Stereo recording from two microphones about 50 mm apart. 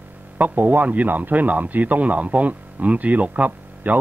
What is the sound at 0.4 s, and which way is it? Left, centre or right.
Speech, right.